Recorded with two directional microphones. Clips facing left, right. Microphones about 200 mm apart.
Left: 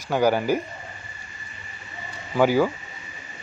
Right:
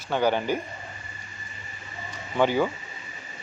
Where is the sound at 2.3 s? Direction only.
5° left (ahead or behind).